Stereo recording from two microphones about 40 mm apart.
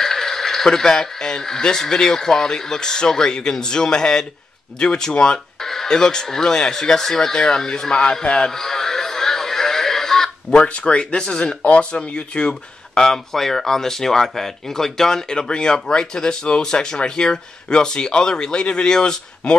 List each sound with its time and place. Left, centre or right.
0.0 s speech: centre
5.6 s speech: centre
8.5 s a sound: centre
10.5 s speech: left
11.6 s speech: left
12.1 s speech: left